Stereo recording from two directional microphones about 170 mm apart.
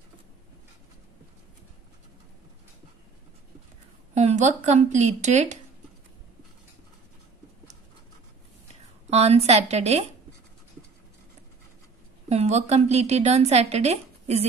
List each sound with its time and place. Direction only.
4.1 s a woman's voice: 40° right (ahead or behind)
9.1 s a woman's voice: 40° right (ahead or behind)
12.3 s a woman's voice: 40° right (ahead or behind)